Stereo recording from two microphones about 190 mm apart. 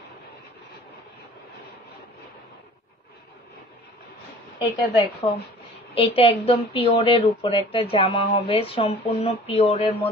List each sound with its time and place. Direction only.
4.6 s a woman's voice: 25° left (ahead or behind)